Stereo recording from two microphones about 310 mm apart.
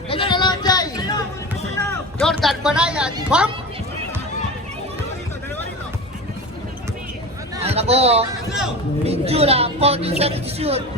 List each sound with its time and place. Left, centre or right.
0.1 s a sound: centre
1.9 s music: centre
7.6 s speech: centre